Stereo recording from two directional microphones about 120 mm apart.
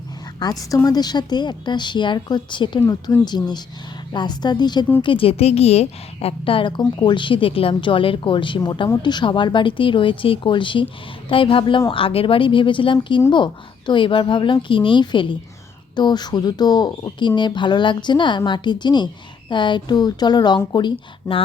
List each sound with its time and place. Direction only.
0.4 s a woman's voice: 35° left (ahead or behind)
5.0 s a woman's voice: 50° left (ahead or behind)